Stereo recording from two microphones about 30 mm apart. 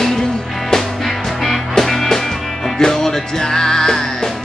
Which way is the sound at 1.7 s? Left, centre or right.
Centre.